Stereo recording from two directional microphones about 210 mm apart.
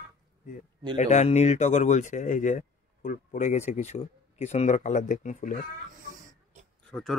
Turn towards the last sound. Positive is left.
turn(degrees=0)  # may be behind; listen again after turning